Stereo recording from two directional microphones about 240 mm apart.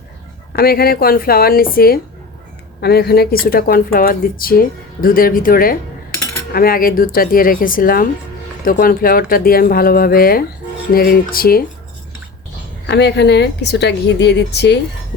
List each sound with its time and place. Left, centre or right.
0.5 s speech: left
12.9 s a woman's voice: left